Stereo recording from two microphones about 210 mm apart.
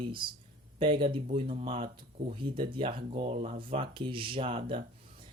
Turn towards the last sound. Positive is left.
turn(degrees=-25)  # may be behind; listen again after turning